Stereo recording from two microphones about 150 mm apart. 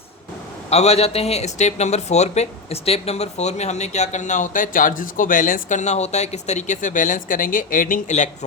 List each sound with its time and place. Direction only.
0.7 s a man's voice: 45° left (ahead or behind)